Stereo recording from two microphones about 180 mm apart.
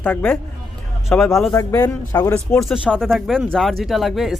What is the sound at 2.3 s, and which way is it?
Speech, 5° left (ahead or behind).